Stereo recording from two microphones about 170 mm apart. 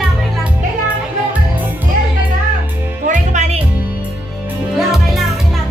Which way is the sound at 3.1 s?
40° right (ahead or behind).